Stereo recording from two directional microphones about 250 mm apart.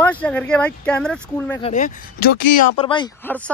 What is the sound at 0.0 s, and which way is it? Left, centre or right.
Speech, centre.